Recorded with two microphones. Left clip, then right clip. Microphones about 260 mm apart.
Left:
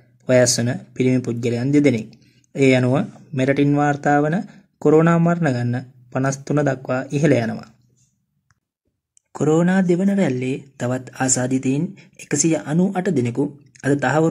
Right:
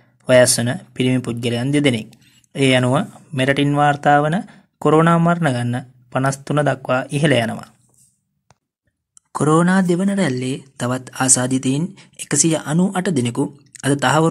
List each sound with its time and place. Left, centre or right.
0.2 s speech: right
9.3 s speech: right